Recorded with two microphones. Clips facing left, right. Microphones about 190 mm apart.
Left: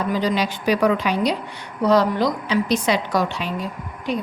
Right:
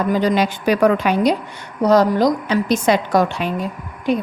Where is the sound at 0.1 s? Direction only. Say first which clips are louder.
Right 5 dB; 50° right (ahead or behind).